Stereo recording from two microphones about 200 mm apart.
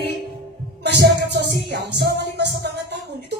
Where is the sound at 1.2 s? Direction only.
55° right (ahead or behind).